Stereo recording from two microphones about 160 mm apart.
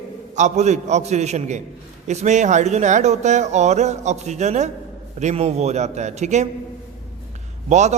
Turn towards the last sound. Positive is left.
turn(degrees=-50)  # may be behind; listen again after turning